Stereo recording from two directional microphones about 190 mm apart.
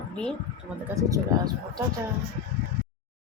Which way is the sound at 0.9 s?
15° right (ahead or behind).